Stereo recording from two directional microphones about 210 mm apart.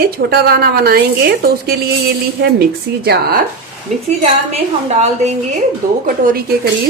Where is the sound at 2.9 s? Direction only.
50° right (ahead or behind).